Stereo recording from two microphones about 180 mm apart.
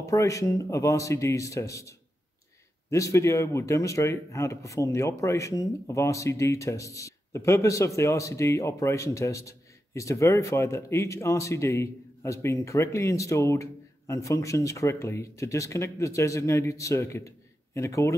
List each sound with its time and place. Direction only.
0.0 s a man's voice: 20° left (ahead or behind)